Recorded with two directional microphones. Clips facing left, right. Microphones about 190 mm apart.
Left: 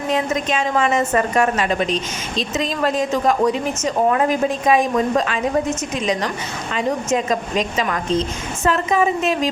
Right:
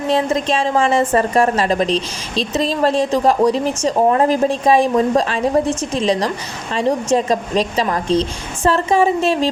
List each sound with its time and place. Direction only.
0.1 s a woman's voice: 35° right (ahead or behind)